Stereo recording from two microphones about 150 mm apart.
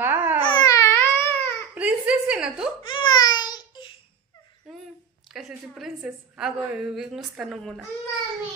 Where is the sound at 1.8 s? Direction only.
10° right (ahead or behind).